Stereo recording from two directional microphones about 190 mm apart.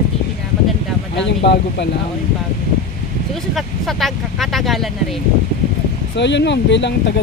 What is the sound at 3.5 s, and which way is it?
Speech, centre (ahead or behind).